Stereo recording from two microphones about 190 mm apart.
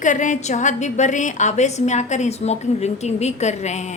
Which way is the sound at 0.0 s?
40° left (ahead or behind).